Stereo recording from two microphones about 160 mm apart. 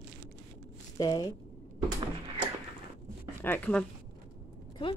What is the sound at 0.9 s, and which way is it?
Speech, 25° left (ahead or behind).